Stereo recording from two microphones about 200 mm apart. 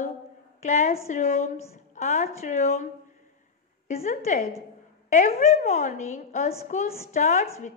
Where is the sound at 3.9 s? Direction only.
35° left (ahead or behind).